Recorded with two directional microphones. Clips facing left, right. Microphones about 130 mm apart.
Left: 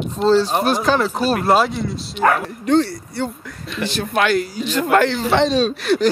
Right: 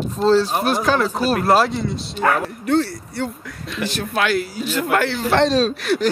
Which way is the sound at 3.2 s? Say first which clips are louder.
Left 1 dB; centre (ahead or behind).